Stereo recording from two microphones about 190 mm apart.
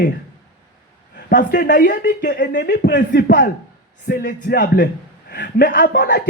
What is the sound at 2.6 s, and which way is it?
Speech, 60° left (ahead or behind).